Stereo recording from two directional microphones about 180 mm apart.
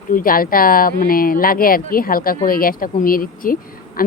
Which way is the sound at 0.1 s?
50° left (ahead or behind).